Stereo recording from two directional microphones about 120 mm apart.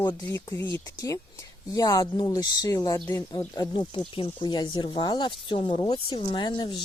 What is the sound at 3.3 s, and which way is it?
Speech, 35° left (ahead or behind).